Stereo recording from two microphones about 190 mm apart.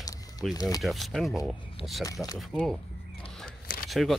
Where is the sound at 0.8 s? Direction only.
Centre (ahead or behind).